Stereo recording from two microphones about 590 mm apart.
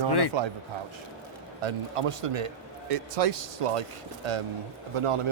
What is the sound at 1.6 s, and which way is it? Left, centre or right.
Speech, right.